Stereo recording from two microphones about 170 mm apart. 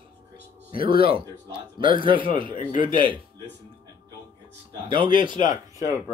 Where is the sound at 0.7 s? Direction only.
60° left (ahead or behind).